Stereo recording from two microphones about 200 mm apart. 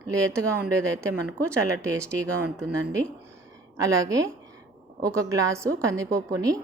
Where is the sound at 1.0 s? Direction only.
15° right (ahead or behind).